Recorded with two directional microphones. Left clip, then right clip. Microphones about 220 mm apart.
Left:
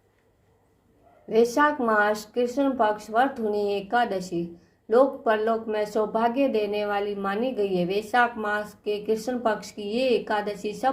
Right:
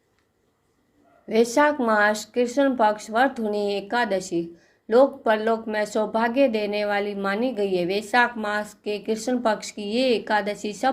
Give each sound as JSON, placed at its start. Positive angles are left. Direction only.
{"t": 1.3, "sound": "speech", "side_deg": -35}